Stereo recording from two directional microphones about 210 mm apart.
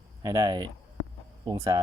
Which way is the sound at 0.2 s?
15° right (ahead or behind).